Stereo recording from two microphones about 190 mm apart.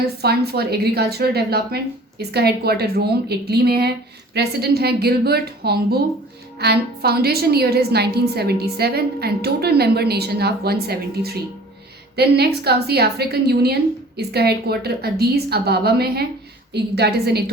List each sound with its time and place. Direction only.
0.2 s a woman's voice: 55° right (ahead or behind)